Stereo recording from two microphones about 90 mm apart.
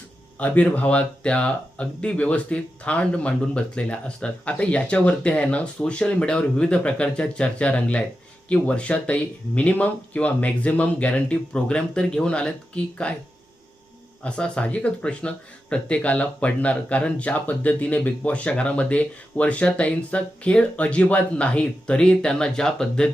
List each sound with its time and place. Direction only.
0.3 s speech: 15° left (ahead or behind)
14.3 s speech: 10° left (ahead or behind)